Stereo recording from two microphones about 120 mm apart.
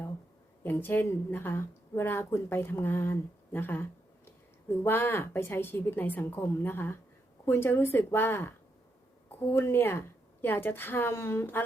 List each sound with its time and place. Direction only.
0.6 s a woman's voice: 15° left (ahead or behind)
4.9 s a woman's voice: 15° left (ahead or behind)